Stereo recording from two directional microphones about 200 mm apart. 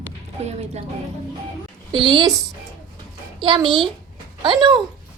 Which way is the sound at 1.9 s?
25° right (ahead or behind).